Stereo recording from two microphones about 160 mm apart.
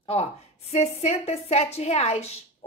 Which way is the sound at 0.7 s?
40° left (ahead or behind).